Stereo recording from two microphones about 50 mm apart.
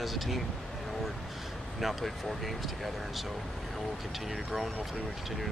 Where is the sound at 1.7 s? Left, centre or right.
Centre.